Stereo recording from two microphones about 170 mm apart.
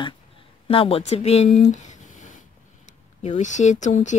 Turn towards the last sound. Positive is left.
turn(degrees=45)  # may be behind; listen again after turning